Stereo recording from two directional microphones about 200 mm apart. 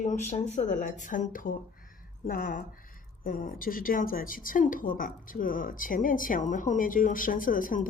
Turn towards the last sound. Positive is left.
turn(degrees=45)  # may be behind; listen again after turning